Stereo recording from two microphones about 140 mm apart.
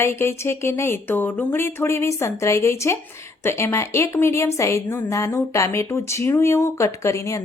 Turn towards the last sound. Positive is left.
turn(degrees=20)  # may be behind; listen again after turning